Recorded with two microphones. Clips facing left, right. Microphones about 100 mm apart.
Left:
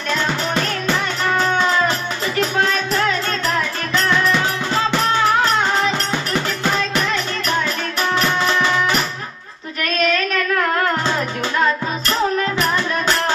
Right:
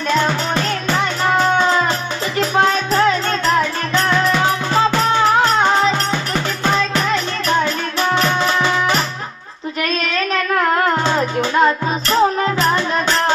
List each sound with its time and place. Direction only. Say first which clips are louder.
5.4 s music: right 3 dB; 25° right (ahead or behind)
11.1 s music: right 4 dB; 25° right (ahead or behind)